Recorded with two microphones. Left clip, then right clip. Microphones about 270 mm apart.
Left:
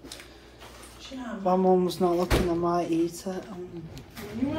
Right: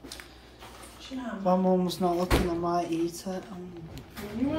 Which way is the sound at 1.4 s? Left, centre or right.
Centre.